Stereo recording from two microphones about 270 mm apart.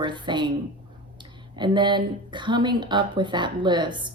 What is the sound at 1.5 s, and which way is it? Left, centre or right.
Speech, centre.